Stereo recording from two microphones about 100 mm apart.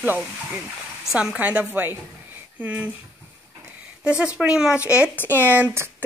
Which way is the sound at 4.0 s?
10° right (ahead or behind).